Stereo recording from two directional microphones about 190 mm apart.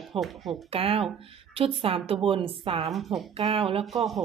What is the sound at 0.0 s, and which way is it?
Speech, centre (ahead or behind).